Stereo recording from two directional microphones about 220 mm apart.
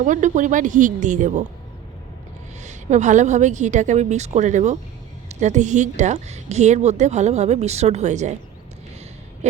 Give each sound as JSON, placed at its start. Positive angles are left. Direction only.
{"t": 0.0, "sound": "a woman's voice", "side_deg": -35}
{"t": 2.6, "sound": "a woman's voice", "side_deg": -30}
{"t": 9.4, "sound": "a sound", "side_deg": -30}